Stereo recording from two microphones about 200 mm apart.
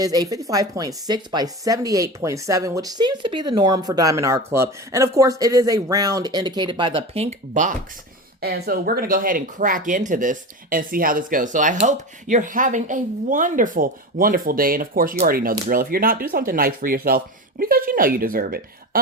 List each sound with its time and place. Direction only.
0.0 s speech: 20° right (ahead or behind); by 7.7 s 35° right (ahead or behind)
8.4 s speech: 50° right (ahead or behind)